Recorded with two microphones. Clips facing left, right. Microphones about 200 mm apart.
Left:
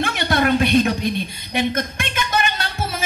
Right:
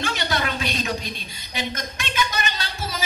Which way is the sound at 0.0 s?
55° left (ahead or behind).